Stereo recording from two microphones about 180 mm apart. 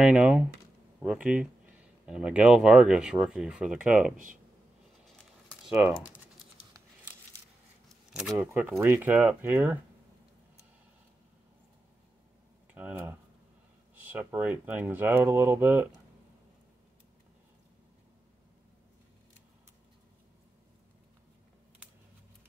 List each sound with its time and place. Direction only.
0.0 s speech: 5° right (ahead or behind)
5.0 s crumpling: centre (ahead or behind)
8.2 s speech: 5° right (ahead or behind)
12.7 s speech: 10° right (ahead or behind)